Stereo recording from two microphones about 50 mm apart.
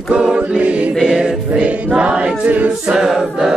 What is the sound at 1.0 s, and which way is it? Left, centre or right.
Music, centre.